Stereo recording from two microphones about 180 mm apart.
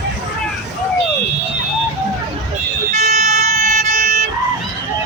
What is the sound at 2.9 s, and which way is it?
Vehicle, 40° right (ahead or behind).